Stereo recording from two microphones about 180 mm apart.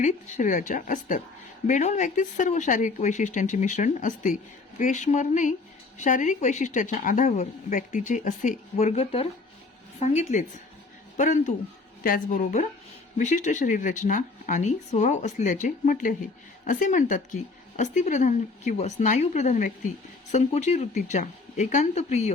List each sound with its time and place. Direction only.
0.0 s a woman's voice: 40° left (ahead or behind)